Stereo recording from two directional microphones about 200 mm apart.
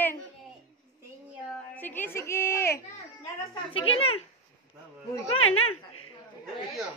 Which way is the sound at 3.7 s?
30° left (ahead or behind).